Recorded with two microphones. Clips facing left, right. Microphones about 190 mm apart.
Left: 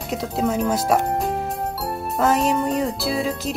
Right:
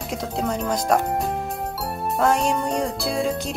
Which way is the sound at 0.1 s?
Centre (ahead or behind).